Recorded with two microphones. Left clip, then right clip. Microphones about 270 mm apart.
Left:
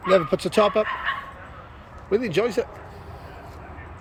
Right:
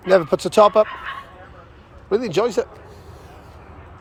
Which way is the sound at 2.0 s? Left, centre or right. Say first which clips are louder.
Right 3 dB; centre.